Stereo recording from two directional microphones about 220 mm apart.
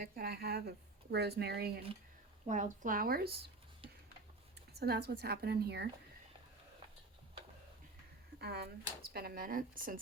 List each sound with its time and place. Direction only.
0.0 s a woman's voice: 45° right (ahead or behind)
2.5 s speech: 35° right (ahead or behind)
4.8 s a woman's voice: 45° right (ahead or behind)
8.4 s a woman's voice: 45° right (ahead or behind)